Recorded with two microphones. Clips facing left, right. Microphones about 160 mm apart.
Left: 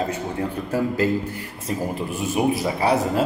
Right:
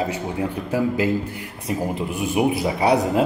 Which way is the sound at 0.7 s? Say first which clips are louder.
Right 1 dB; 10° right (ahead or behind).